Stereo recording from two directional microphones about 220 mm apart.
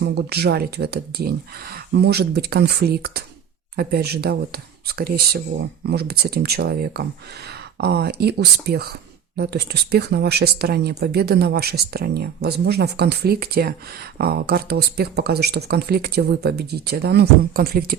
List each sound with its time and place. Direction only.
0.0 s speech: 45° right (ahead or behind)